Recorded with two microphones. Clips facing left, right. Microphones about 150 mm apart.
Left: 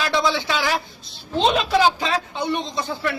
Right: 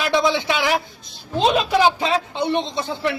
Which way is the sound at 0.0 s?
20° right (ahead or behind).